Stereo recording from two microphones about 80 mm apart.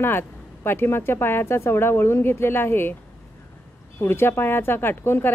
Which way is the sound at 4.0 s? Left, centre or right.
Left.